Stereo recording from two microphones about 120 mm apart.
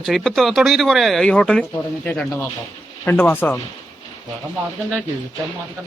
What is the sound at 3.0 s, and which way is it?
Speech, 15° left (ahead or behind).